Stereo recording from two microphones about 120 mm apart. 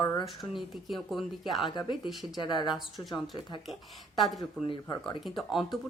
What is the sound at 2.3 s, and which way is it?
Speech, 40° left (ahead or behind).